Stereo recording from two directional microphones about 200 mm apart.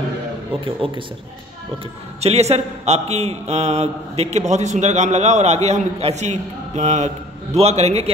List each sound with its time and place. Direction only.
0.7 s a man's voice: 25° right (ahead or behind)
2.1 s a man's voice: 30° right (ahead or behind)